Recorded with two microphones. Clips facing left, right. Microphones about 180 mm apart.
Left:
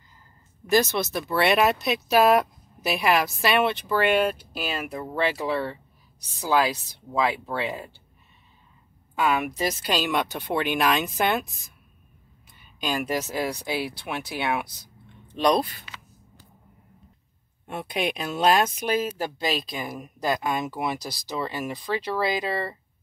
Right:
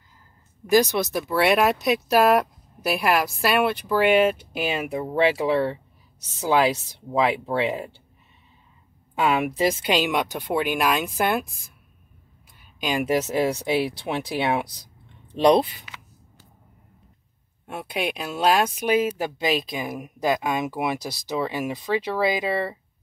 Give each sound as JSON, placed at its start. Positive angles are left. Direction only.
{"t": 0.7, "sound": "speech", "side_deg": -10}
{"t": 9.2, "sound": "speech", "side_deg": -30}
{"t": 12.8, "sound": "speech", "side_deg": -20}
{"t": 17.6, "sound": "speech", "side_deg": -5}